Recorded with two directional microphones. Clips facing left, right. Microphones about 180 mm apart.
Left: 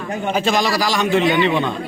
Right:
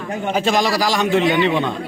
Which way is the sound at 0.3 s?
45° right (ahead or behind).